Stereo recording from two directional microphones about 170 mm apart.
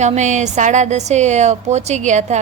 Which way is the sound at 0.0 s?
45° right (ahead or behind).